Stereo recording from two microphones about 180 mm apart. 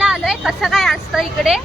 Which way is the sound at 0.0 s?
5° right (ahead or behind).